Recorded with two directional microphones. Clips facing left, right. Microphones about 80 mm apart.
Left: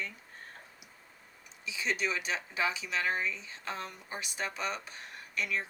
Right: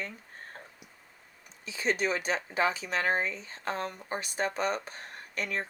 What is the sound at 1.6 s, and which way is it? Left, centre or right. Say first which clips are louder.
Speech: right 4 dB; right.